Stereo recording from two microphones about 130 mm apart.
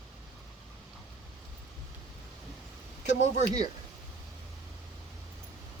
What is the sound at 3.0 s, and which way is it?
Speech, 65° left (ahead or behind).